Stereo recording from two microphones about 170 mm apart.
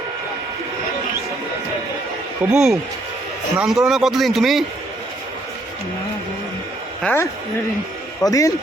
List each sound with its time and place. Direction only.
2.5 s speech: 5° right (ahead or behind)
7.0 s speech: 10° left (ahead or behind)